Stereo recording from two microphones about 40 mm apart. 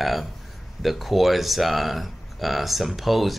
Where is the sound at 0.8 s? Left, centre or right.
Centre.